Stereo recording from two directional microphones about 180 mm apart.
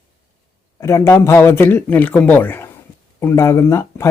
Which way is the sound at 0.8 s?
15° left (ahead or behind).